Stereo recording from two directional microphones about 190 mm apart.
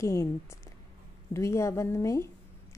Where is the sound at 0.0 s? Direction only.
15° left (ahead or behind).